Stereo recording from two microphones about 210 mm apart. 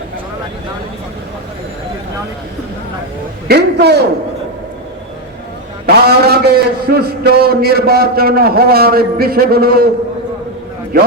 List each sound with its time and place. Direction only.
3.5 s a man's voice: 50° right (ahead or behind)
5.8 s a man's voice: 50° right (ahead or behind)